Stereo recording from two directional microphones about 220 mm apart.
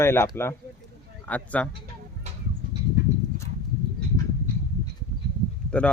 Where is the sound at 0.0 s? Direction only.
10° left (ahead or behind).